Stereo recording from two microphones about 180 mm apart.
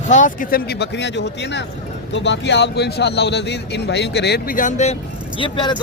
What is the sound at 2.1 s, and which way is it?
A man's voice, 85° left.